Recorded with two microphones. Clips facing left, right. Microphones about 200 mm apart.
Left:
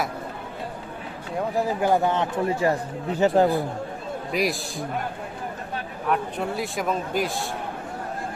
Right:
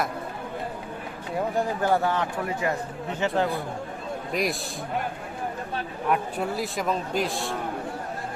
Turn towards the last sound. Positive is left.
turn(degrees=0)  # may be behind; listen again after turning